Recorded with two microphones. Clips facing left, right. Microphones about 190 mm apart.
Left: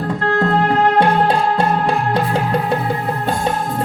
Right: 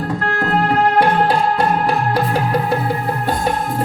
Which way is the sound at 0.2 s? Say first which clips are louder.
Left 4 dB; 25° left (ahead or behind).